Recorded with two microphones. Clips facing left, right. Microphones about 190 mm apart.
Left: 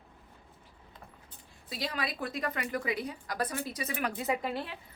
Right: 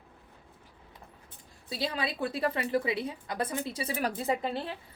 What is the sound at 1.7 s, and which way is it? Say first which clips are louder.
A woman's voice: right 3 dB; 30° right (ahead or behind).